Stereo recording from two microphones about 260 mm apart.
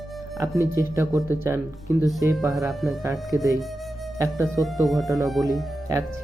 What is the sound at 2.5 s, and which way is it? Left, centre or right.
Speech, centre.